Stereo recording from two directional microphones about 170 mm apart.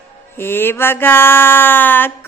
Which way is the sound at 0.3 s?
15° left (ahead or behind).